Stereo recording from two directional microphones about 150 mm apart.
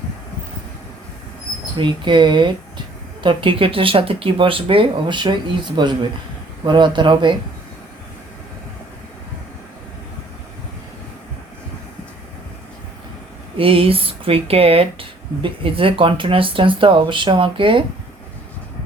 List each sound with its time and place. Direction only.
1.8 s speech: 30° right (ahead or behind)
13.6 s speech: 40° right (ahead or behind)